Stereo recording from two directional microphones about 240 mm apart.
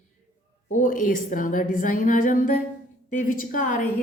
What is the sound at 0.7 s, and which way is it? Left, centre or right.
A woman's voice, left.